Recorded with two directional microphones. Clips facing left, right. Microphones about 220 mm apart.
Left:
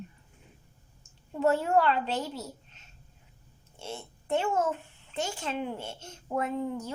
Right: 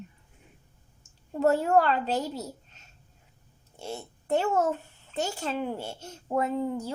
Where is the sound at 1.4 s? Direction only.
40° right (ahead or behind).